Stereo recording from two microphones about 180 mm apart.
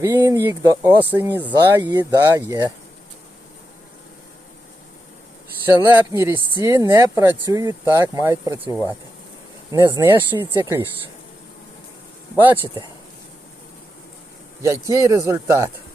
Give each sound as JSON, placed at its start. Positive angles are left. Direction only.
{"t": 0.0, "sound": "speech", "side_deg": -15}
{"t": 1.5, "sound": "speech", "side_deg": -20}
{"t": 5.6, "sound": "speech", "side_deg": -10}
{"t": 14.6, "sound": "speech", "side_deg": -15}